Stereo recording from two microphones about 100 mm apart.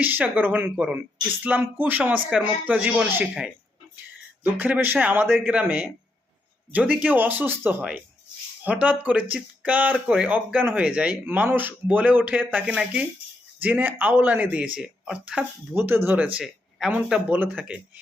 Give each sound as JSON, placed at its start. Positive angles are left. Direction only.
{"t": 0.0, "sound": "speech", "side_deg": -20}
{"t": 15.7, "sound": "speech", "side_deg": -25}
{"t": 16.4, "sound": "speech", "side_deg": -10}